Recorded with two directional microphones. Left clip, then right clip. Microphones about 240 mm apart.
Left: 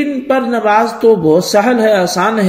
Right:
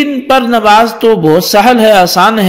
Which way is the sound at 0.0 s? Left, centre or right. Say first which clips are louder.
Right 5 dB; right.